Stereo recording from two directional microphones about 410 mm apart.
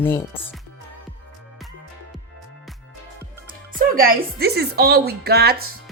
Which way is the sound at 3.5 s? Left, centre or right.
Right.